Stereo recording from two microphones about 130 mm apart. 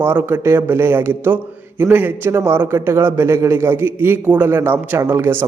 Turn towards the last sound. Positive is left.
turn(degrees=-20)  # may be behind; listen again after turning